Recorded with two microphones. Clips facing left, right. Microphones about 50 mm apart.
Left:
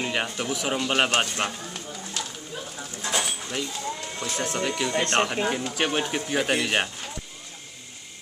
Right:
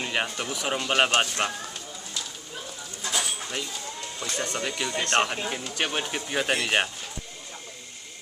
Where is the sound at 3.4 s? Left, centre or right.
Centre.